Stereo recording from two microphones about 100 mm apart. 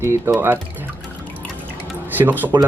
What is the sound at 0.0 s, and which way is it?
Speech, 25° right (ahead or behind).